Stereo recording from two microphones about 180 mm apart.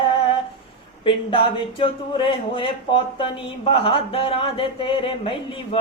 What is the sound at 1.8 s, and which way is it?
Speech, 30° left (ahead or behind).